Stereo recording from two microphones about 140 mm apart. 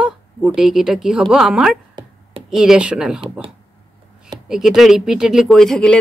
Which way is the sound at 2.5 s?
5° right (ahead or behind).